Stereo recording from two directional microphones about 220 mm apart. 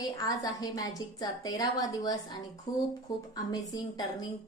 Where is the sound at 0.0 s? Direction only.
15° left (ahead or behind).